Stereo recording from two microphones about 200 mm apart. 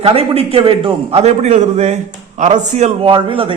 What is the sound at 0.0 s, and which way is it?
A man's voice, 30° right (ahead or behind).